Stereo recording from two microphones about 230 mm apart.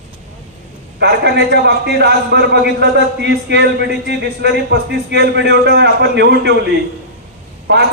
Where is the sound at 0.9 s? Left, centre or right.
Right.